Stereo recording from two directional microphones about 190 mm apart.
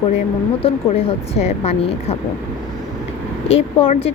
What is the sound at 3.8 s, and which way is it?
Speech, 30° left (ahead or behind).